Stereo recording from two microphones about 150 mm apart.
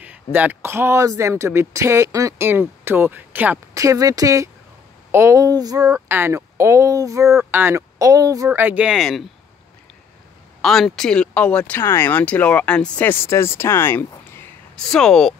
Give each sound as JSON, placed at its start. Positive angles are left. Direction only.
{"t": 0.0, "sound": "speech", "side_deg": -10}
{"t": 10.6, "sound": "speech", "side_deg": 0}
{"t": 14.9, "sound": "speech", "side_deg": 5}